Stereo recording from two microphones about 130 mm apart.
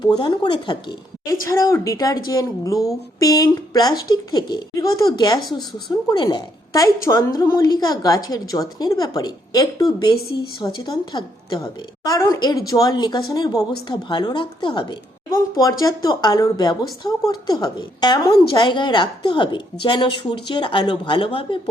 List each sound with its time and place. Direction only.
0.0 s a woman's voice: 35° left (ahead or behind)
1.5 s a woman's voice: 25° left (ahead or behind); by 21.6 s 40° left (ahead or behind)